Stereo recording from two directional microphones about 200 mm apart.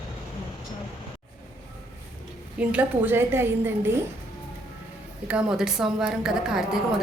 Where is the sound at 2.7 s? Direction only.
10° right (ahead or behind).